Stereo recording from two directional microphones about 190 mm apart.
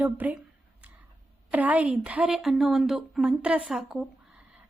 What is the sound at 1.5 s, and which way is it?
A woman's voice, 10° right (ahead or behind).